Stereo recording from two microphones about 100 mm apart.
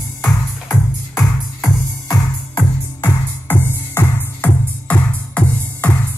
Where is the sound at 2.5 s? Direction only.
20° left (ahead or behind).